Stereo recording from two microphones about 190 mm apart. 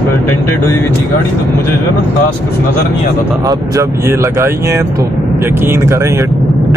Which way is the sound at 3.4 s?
20° right (ahead or behind).